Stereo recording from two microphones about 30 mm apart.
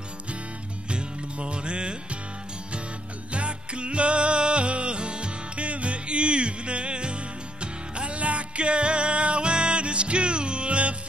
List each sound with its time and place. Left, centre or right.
0.8 s music: right
3.3 s music: right
5.7 s music: right